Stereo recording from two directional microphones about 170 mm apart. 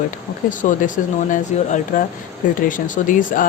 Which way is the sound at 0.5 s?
50° left (ahead or behind).